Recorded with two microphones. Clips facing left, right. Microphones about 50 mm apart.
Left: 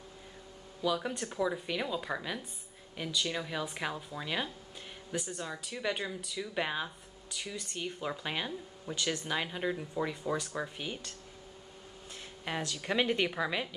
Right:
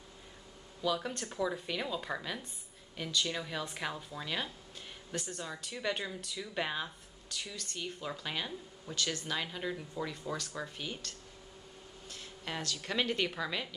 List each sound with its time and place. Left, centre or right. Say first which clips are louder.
0.8 s a woman's voice: left 2 dB; centre